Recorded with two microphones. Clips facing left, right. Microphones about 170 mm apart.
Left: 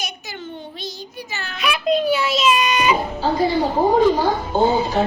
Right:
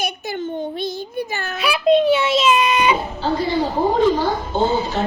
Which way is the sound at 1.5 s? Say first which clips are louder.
Right 4 dB; 30° right (ahead or behind).